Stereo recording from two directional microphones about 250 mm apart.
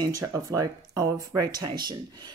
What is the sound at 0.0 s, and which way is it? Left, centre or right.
Speech, centre.